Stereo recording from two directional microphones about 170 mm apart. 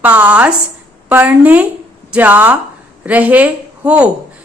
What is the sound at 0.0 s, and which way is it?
A woman's voice, 10° right (ahead or behind).